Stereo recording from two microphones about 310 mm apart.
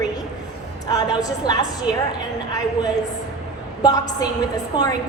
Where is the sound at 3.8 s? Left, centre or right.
Centre.